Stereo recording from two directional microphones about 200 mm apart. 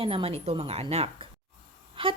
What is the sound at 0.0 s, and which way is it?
A woman's voice, 25° right (ahead or behind).